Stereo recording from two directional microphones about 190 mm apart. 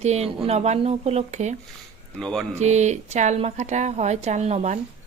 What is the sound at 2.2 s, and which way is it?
Speech, 5° left (ahead or behind).